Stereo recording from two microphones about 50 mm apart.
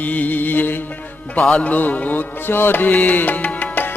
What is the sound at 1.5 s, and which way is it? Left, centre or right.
Music, left.